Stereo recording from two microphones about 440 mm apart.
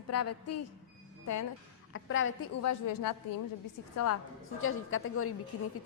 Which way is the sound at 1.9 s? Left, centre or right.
Left.